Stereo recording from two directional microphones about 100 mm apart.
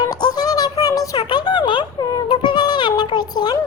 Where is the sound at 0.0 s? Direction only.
40° left (ahead or behind).